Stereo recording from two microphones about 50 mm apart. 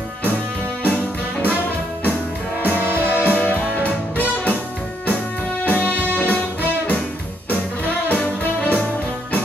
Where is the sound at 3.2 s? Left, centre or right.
Left; by 5.5 s centre.